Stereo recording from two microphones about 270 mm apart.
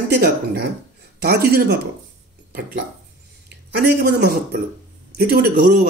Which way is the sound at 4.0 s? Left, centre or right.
Right.